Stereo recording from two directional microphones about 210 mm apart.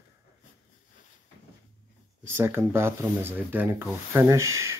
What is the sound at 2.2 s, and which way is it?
Rub, 10° right (ahead or behind).